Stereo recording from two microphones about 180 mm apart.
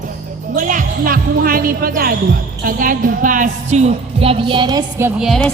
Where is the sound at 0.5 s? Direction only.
45° right (ahead or behind); by 5.0 s 25° right (ahead or behind).